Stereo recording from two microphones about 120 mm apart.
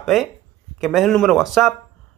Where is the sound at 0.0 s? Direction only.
Centre (ahead or behind).